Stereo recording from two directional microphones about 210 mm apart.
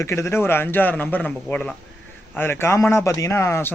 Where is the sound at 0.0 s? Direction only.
15° left (ahead or behind).